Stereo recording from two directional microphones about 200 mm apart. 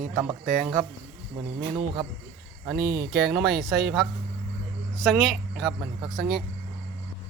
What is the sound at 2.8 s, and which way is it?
Speech, 55° right (ahead or behind).